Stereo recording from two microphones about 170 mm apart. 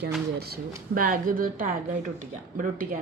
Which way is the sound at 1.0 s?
55° right (ahead or behind).